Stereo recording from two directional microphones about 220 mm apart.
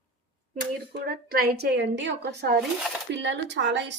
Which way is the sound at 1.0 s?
45° right (ahead or behind).